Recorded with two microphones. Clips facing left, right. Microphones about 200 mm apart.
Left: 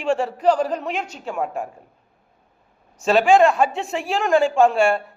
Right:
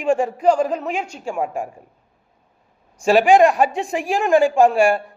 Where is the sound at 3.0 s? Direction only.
10° right (ahead or behind).